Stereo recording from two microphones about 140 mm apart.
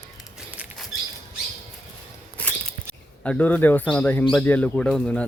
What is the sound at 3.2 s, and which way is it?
Speech, 10° left (ahead or behind).